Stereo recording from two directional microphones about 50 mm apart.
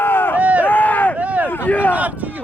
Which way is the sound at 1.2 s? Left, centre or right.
Right.